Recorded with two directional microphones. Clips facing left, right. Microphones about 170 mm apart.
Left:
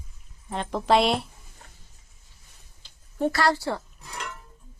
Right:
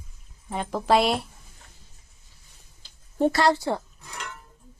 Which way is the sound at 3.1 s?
25° right (ahead or behind).